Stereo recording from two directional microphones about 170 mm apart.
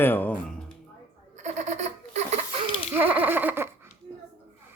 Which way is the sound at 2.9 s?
10° right (ahead or behind).